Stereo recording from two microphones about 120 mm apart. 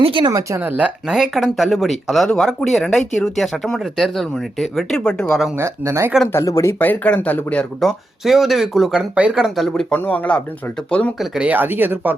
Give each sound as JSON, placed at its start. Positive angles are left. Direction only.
{"t": 0.0, "sound": "speech", "side_deg": -45}
{"t": 0.3, "sound": "speech", "side_deg": -30}
{"t": 0.6, "sound": "speech", "side_deg": -15}
{"t": 5.5, "sound": "speech", "side_deg": -25}
{"t": 6.3, "sound": "speech", "side_deg": 25}
{"t": 6.7, "sound": "speech", "side_deg": 15}
{"t": 11.2, "sound": "speech", "side_deg": -10}